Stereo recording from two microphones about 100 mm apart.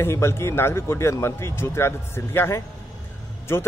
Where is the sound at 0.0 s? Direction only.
25° left (ahead or behind).